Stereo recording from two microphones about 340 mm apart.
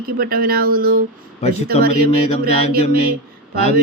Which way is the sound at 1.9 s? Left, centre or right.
Centre.